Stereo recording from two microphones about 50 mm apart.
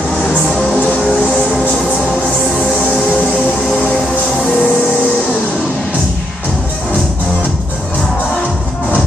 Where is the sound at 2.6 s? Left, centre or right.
Left.